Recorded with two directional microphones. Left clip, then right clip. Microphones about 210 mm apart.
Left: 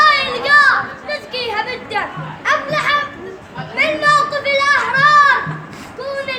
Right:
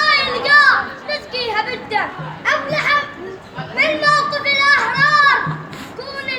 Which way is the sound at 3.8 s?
10° left (ahead or behind).